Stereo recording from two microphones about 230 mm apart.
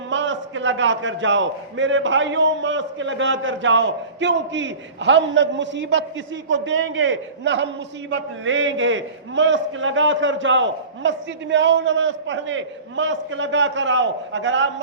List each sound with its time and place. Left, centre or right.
0.1 s a man's voice: right